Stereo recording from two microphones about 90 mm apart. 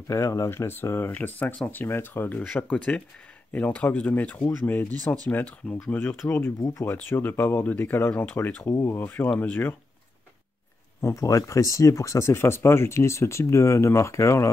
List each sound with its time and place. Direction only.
0.1 s speech: 35° left (ahead or behind)
4.9 s speech: 45° right (ahead or behind)
5.3 s speech: 20° left (ahead or behind)
6.6 s speech: 35° left (ahead or behind)
6.9 s speech: 25° left (ahead or behind)
11.0 s speech: 30° left (ahead or behind)